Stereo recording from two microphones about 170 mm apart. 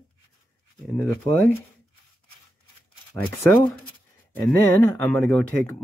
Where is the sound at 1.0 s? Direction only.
20° left (ahead or behind).